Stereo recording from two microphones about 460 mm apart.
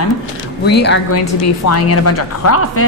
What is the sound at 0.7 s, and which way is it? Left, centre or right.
A woman's voice, left.